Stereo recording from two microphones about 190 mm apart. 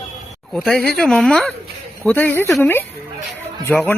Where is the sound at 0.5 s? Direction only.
Centre (ahead or behind).